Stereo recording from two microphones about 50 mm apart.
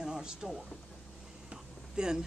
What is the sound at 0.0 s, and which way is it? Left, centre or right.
Speech, centre.